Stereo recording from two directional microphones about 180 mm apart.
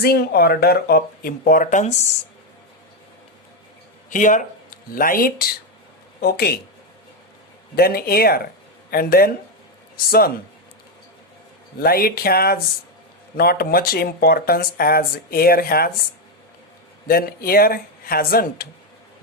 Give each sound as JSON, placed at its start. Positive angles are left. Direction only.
{"t": 0.0, "sound": "speech", "side_deg": 60}
{"t": 4.1, "sound": "speech", "side_deg": 45}
{"t": 7.8, "sound": "speech", "side_deg": 60}
{"t": 11.8, "sound": "speech", "side_deg": 55}
{"t": 17.1, "sound": "speech", "side_deg": 55}